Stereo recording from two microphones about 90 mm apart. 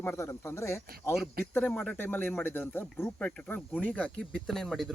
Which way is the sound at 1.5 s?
15° left (ahead or behind).